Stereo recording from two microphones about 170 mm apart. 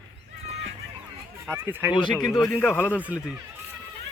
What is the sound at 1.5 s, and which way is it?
Speech, 15° right (ahead or behind).